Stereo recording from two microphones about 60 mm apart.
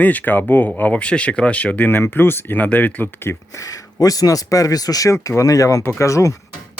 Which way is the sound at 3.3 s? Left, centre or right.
Left.